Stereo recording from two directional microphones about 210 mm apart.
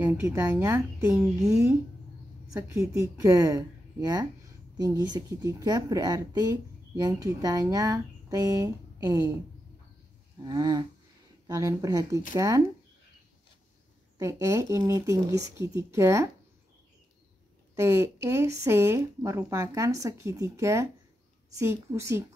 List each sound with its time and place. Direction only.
0.0 s speech: 15° right (ahead or behind)
2.5 s speech: 15° right (ahead or behind)
10.4 s a sound: 20° right (ahead or behind)
11.4 s speech: 15° right (ahead or behind)
14.1 s speech: 15° right (ahead or behind)
17.7 s speech: 10° right (ahead or behind)